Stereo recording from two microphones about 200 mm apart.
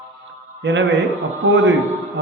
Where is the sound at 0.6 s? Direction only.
65° right (ahead or behind).